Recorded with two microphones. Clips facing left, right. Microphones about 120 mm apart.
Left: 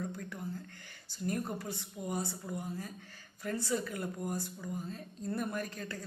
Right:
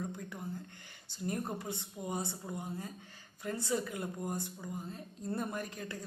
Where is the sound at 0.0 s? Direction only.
15° right (ahead or behind).